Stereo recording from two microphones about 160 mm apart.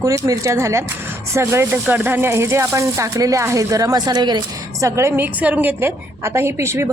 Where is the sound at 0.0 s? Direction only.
20° right (ahead or behind).